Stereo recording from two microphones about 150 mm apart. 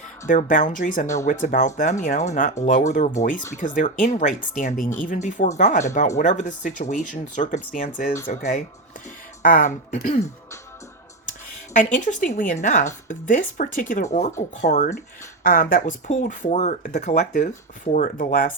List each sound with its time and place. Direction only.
0.3 s speech: 60° left (ahead or behind)
1.0 s speech: 20° left (ahead or behind)
1.3 s speech: 60° left (ahead or behind)
9.4 s speech: 65° left (ahead or behind)
12.0 s speech: 60° left (ahead or behind)
15.4 s speech: 65° left (ahead or behind)
17.9 s speech: 65° left (ahead or behind)